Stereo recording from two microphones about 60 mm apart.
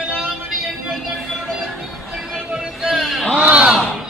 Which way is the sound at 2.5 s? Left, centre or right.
Centre.